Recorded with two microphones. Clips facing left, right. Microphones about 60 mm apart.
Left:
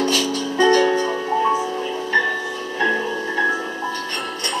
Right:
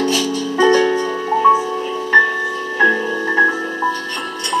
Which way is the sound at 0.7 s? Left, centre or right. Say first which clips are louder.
Right 2 dB; centre.